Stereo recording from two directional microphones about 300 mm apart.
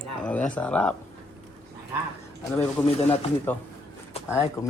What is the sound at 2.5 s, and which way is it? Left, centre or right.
Speech, centre.